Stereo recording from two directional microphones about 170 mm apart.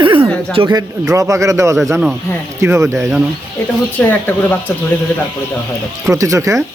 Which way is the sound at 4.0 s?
10° left (ahead or behind).